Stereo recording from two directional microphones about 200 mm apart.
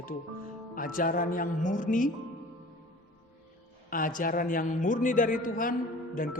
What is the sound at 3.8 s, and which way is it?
A woman's voice, 45° left (ahead or behind).